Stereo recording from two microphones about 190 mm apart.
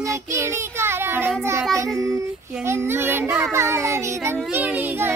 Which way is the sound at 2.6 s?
15° right (ahead or behind).